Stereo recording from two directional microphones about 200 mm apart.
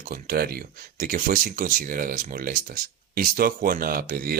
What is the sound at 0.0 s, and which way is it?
Speech, 45° right (ahead or behind).